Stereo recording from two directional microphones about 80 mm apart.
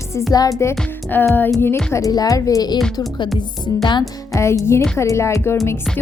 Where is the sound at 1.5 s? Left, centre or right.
Left.